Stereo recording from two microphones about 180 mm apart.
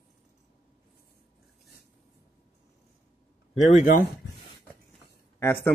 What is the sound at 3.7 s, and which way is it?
Speech, 45° left (ahead or behind).